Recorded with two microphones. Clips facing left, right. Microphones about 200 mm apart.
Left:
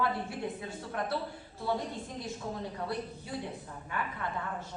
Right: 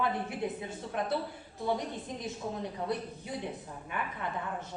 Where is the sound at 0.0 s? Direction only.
20° right (ahead or behind).